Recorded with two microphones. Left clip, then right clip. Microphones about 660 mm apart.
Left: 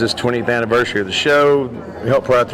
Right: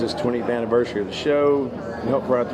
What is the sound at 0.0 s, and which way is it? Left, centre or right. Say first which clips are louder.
Speech: left 5 dB; left.